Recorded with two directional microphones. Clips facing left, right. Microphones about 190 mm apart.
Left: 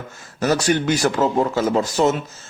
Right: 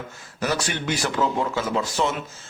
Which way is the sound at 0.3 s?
45° left (ahead or behind).